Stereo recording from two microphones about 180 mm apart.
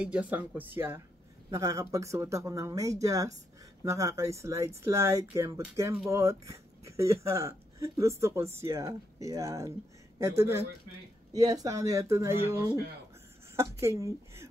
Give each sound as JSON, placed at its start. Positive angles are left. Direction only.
{"t": 0.0, "sound": "speech", "side_deg": -5}